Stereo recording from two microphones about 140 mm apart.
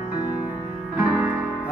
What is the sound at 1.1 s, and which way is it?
Music, 15° right (ahead or behind).